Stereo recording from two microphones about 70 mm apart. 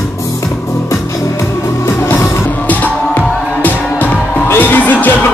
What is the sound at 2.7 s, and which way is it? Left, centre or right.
Music, left.